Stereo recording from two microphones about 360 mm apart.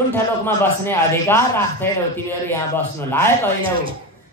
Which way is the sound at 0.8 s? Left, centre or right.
Centre.